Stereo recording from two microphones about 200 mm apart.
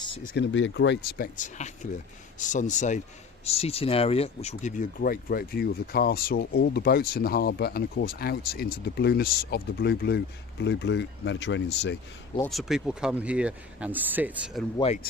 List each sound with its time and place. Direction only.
0.3 s speech: 65° left (ahead or behind)
1.4 s speech: 35° left (ahead or behind); by 11.9 s 60° left (ahead or behind)
12.5 s speech: centre (ahead or behind)